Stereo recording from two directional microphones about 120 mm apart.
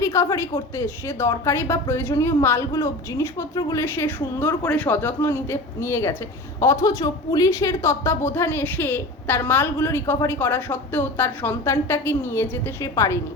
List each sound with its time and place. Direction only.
0.0 s a woman's voice: 25° left (ahead or behind)